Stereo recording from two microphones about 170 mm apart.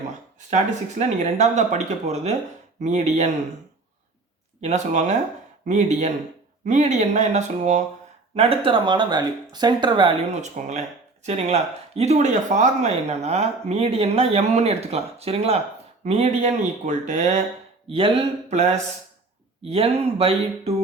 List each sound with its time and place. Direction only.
0.3 s speech: 45° right (ahead or behind)
4.6 s speech: 45° right (ahead or behind)
8.4 s speech: 35° right (ahead or behind)
10.4 s speech: 40° right (ahead or behind)
18.5 s speech: 40° right (ahead or behind)